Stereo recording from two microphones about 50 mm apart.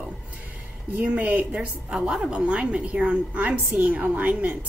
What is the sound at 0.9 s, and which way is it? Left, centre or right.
A woman's voice, right.